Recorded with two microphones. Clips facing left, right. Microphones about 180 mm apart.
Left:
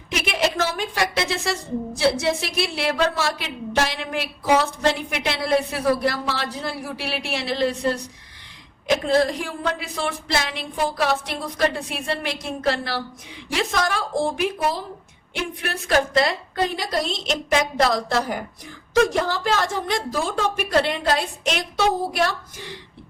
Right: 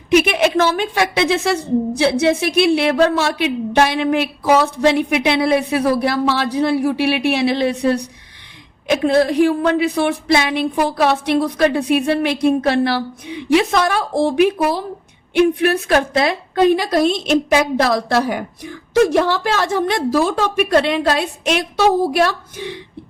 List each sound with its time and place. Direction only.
0.1 s a woman's voice: 60° right (ahead or behind)
9.0 s a woman's voice: 65° right (ahead or behind)
18.1 s a woman's voice: 70° right (ahead or behind)